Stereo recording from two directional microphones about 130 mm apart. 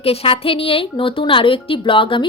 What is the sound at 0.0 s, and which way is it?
A woman's voice, 50° left (ahead or behind).